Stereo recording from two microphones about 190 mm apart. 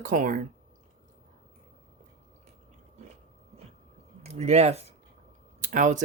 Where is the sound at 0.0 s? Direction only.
45° right (ahead or behind).